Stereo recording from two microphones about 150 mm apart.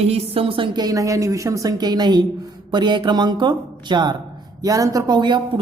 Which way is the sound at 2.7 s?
30° right (ahead or behind).